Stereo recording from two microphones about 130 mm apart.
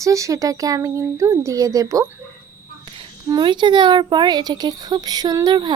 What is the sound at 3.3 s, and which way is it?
Speech, 35° right (ahead or behind).